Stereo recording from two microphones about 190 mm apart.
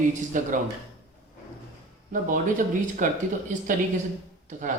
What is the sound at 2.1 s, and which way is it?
Speech, 45° right (ahead or behind).